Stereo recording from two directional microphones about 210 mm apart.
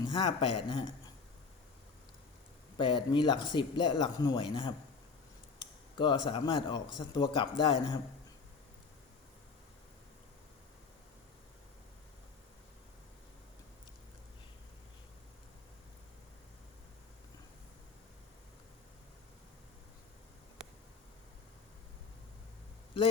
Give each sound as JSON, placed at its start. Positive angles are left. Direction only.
{"t": 0.0, "sound": "speech", "side_deg": 20}
{"t": 2.7, "sound": "speech", "side_deg": 25}